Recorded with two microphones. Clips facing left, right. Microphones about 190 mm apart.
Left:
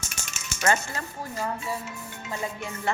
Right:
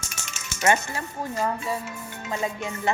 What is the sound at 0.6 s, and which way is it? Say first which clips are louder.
Speech: right 3 dB; 20° right (ahead or behind).